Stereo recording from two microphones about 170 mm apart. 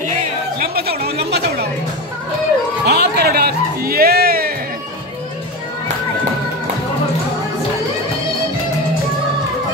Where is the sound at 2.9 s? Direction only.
75° right (ahead or behind).